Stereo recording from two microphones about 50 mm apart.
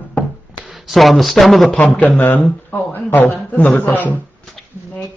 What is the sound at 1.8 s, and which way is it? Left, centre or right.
Speech, left.